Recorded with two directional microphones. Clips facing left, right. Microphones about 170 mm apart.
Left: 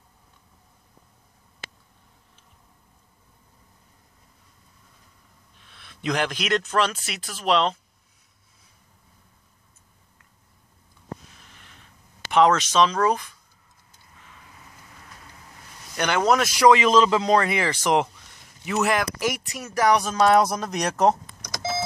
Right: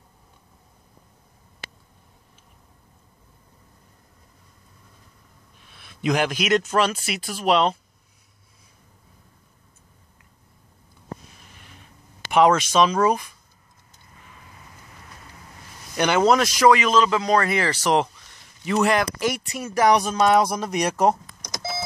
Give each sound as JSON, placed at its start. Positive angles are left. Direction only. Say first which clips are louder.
{"t": 5.7, "sound": "speech", "louder": "right 4 dB", "side_deg": -10}
{"t": 11.4, "sound": "a sound", "louder": "right 3 dB", "side_deg": -10}
{"t": 12.3, "sound": "speech", "louder": "right 1 dB", "side_deg": -15}
{"t": 16.0, "sound": "speech", "louder": "right 3 dB", "side_deg": -5}
{"t": 16.7, "sound": "speech", "louder": "left 1 dB", "side_deg": 30}